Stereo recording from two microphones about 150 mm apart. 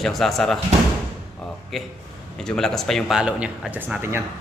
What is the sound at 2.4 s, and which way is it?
A man's voice, 5° left (ahead or behind).